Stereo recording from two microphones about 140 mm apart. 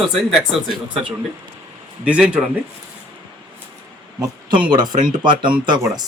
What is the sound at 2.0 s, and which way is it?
Speech, 10° right (ahead or behind).